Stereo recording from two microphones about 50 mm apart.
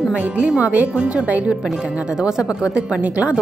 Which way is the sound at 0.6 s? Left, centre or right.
Right.